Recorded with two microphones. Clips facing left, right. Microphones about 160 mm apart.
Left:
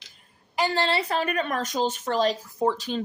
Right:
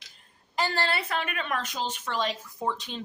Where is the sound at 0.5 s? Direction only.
20° left (ahead or behind).